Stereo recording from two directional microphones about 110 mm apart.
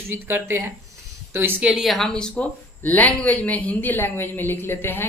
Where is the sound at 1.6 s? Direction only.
5° right (ahead or behind); by 5.0 s 20° left (ahead or behind).